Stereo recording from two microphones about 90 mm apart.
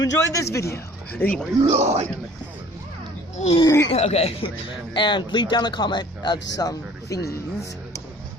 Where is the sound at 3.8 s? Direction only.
90° left.